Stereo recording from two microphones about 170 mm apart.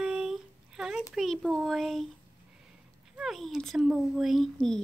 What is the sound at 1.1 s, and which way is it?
Speech, centre (ahead or behind).